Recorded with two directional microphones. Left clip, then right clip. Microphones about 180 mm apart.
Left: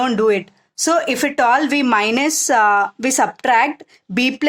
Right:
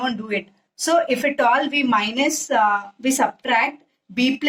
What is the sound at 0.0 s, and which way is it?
Speech, 45° left (ahead or behind).